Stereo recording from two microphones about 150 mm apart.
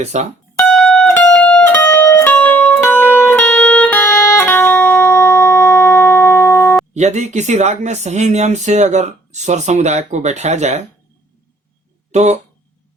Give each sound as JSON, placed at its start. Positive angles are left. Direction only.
{"t": 0.0, "sound": "speech", "side_deg": -50}
{"t": 0.6, "sound": "music", "side_deg": 5}
{"t": 6.9, "sound": "speech", "side_deg": -50}
{"t": 12.1, "sound": "speech", "side_deg": -50}